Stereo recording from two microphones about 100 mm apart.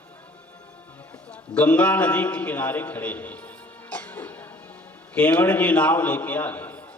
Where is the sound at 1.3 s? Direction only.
15° left (ahead or behind).